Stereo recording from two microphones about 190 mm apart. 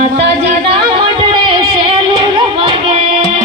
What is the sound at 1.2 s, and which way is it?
Singing, 25° right (ahead or behind).